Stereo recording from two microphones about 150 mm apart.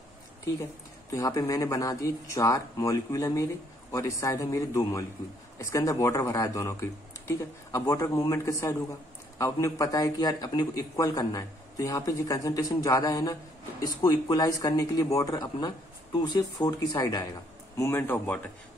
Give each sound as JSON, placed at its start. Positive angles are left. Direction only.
{"t": 1.1, "sound": "speech", "side_deg": 25}